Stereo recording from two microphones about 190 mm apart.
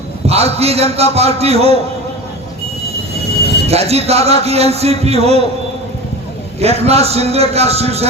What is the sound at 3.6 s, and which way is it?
A man's voice, 35° right (ahead or behind).